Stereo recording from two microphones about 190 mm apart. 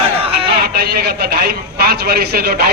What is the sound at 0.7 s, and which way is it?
A man's voice, 55° right (ahead or behind).